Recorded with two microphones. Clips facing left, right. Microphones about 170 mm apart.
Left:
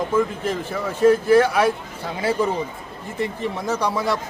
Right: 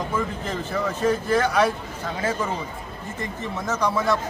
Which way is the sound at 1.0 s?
5° left (ahead or behind).